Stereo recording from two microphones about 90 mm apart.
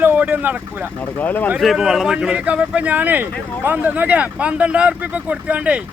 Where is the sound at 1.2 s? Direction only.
20° left (ahead or behind).